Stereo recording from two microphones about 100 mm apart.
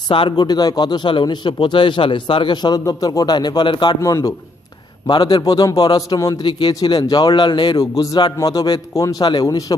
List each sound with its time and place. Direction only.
0.1 s speech: 60° left (ahead or behind)
0.3 s speech: 45° left (ahead or behind)
4.0 s a man's voice: 35° left (ahead or behind)
5.0 s a man's voice: 45° left (ahead or behind)
6.4 s speech: 50° left (ahead or behind)
7.9 s a man's voice: 35° left (ahead or behind)